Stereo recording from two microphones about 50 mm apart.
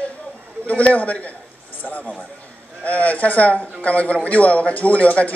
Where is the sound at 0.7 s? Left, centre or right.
Left.